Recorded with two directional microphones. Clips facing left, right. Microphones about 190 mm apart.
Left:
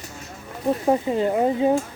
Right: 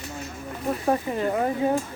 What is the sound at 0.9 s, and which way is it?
Speech, 20° left (ahead or behind).